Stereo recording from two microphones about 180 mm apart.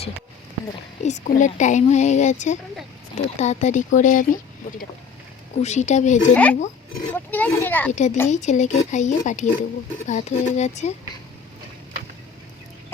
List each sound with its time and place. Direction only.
1.0 s a woman's voice: 40° left (ahead or behind)
5.6 s a woman's voice: 40° left (ahead or behind)
6.3 s a child's voice: 10° left (ahead or behind)
7.9 s a woman's voice: 40° left (ahead or behind)